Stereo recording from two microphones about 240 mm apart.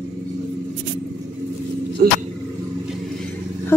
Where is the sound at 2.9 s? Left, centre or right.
Centre.